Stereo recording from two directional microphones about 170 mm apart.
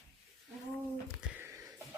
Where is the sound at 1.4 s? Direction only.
15° right (ahead or behind).